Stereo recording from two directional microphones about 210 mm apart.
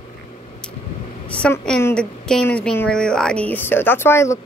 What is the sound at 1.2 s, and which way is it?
A woman's voice, 5° left (ahead or behind).